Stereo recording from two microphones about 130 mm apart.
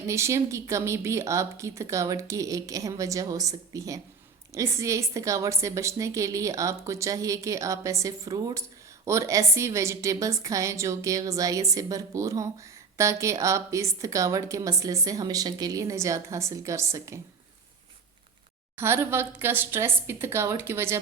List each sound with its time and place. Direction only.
0.1 s a woman's voice: 20° right (ahead or behind)
18.8 s a woman's voice: 15° right (ahead or behind)